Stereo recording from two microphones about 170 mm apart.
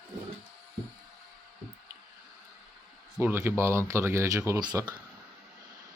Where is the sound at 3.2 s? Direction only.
15° right (ahead or behind).